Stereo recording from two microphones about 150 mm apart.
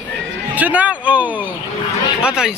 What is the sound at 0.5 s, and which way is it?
Speech, 10° right (ahead or behind).